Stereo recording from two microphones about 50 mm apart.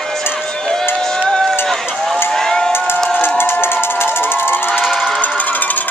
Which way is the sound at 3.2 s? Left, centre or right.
Left.